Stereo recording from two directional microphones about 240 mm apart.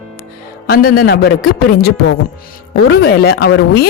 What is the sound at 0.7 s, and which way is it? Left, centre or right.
A woman's voice, left.